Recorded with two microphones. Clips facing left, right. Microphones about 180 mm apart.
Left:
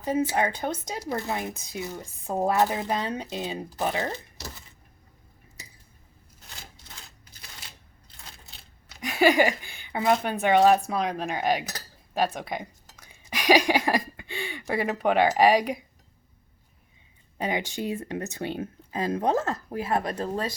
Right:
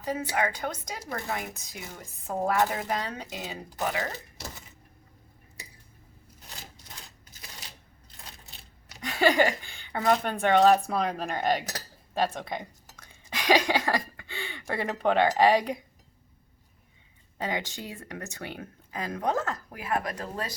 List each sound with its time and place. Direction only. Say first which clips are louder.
0.0 s speech: left 4 dB; 25° left (ahead or behind)
9.0 s a woman's voice: left 2 dB; 10° left (ahead or behind)
12.1 s a sound: left 2 dB; 5° left (ahead or behind)
17.3 s speech: left 3 dB; 15° left (ahead or behind)